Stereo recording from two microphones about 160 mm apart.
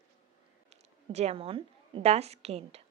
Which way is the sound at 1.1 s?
40° right (ahead or behind).